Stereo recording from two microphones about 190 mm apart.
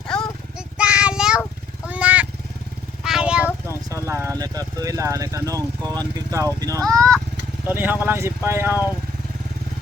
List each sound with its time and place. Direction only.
0.1 s a sound: 5° left (ahead or behind)
0.8 s child singing: 5° right (ahead or behind)
1.9 s vehicle: 5° right (ahead or behind)
3.8 s speech: 15° right (ahead or behind)